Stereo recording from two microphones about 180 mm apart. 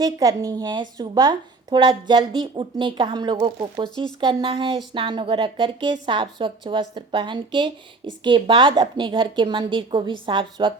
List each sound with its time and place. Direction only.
0.0 s a woman's voice: 20° right (ahead or behind)
3.8 s speech: 5° left (ahead or behind)
4.2 s a woman's voice: 25° right (ahead or behind)